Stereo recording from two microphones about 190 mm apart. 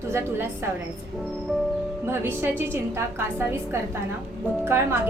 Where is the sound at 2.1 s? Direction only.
15° right (ahead or behind).